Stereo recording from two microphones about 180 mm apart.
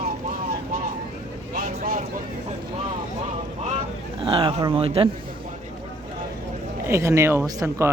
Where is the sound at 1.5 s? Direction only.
50° right (ahead or behind).